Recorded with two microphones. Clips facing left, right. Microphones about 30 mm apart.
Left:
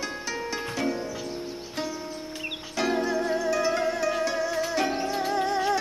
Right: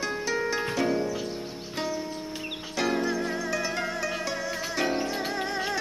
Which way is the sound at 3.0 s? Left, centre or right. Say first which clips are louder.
Left 2 dB; right.